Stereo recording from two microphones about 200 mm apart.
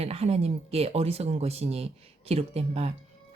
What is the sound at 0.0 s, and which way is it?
Speech, 30° right (ahead or behind).